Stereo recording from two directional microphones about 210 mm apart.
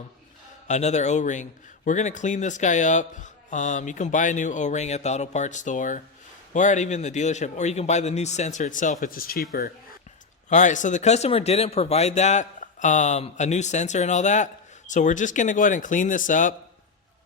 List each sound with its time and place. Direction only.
0.7 s speech: 35° left (ahead or behind)